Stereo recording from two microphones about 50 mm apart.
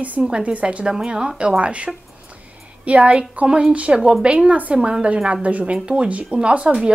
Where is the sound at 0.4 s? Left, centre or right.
Right.